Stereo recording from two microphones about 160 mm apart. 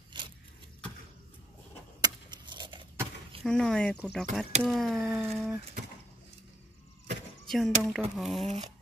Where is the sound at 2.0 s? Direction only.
30° right (ahead or behind).